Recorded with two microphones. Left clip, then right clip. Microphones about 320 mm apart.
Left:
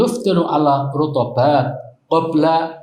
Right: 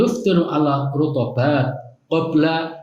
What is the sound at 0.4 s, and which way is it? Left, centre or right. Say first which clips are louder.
Speech: left 4 dB; centre.